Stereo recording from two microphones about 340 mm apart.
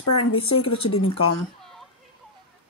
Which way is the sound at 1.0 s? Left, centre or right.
Left.